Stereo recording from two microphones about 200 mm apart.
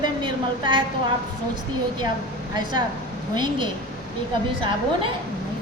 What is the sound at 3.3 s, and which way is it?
Speech, 20° right (ahead or behind).